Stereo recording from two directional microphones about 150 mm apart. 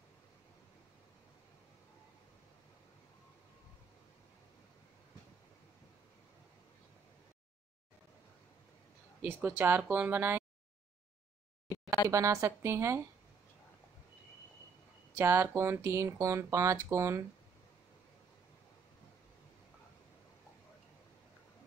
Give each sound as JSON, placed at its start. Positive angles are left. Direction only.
{"t": 9.2, "sound": "speech", "side_deg": -10}
{"t": 11.7, "sound": "a sound", "side_deg": 20}
{"t": 12.1, "sound": "a woman's voice", "side_deg": -20}
{"t": 15.1, "sound": "speech", "side_deg": -15}